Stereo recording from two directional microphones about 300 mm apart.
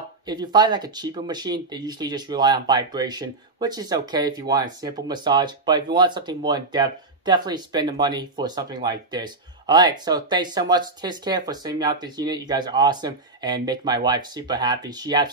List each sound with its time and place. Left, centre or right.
0.3 s speech: centre